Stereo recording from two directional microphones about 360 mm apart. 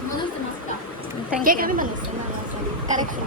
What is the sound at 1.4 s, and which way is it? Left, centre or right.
Speech, right.